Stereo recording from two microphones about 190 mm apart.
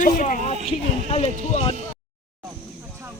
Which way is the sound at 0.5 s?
35° right (ahead or behind).